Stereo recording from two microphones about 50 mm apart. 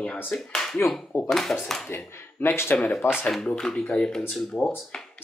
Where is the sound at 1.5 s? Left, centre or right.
Centre.